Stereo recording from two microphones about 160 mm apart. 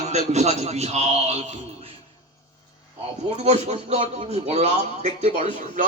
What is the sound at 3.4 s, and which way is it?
A man's voice, 45° right (ahead or behind).